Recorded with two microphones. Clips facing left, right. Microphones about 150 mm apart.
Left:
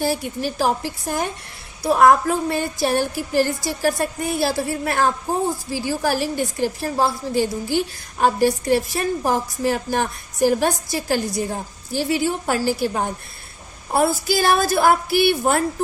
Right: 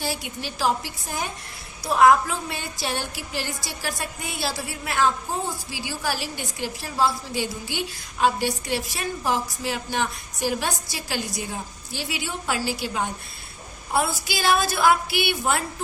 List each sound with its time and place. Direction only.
0.0 s a woman's voice: 45° left (ahead or behind)